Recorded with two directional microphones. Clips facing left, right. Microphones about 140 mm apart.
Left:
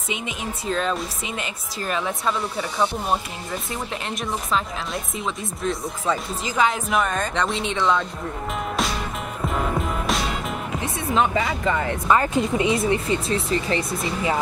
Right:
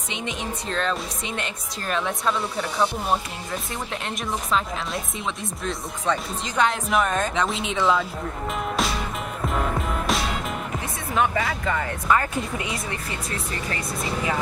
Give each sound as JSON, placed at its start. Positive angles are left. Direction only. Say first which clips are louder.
{"t": 0.1, "sound": "speech", "louder": "left 1 dB", "side_deg": 5}
{"t": 9.5, "sound": "music", "louder": "left 1 dB", "side_deg": 0}
{"t": 11.1, "sound": "speech", "louder": "left 1 dB", "side_deg": 20}